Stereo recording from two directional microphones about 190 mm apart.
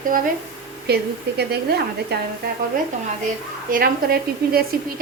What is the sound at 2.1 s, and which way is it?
Speech, 60° right (ahead or behind).